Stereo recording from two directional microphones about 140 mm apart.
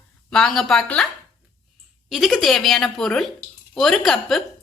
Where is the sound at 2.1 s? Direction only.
Centre (ahead or behind).